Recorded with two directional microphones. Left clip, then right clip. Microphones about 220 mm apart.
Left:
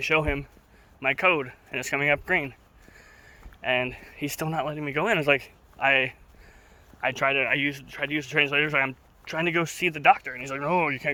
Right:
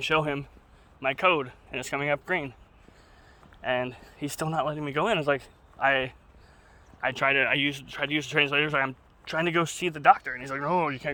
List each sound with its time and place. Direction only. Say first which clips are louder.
0.0 s speech: left 2 dB; 5° left (ahead or behind)
3.6 s speech: left 3 dB; 5° left (ahead or behind)